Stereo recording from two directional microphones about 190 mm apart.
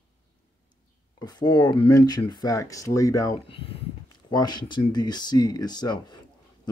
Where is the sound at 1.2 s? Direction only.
20° left (ahead or behind).